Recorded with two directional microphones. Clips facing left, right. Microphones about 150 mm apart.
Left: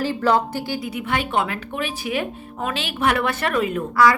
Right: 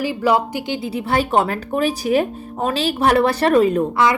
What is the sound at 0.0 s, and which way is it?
Speech, 10° right (ahead or behind).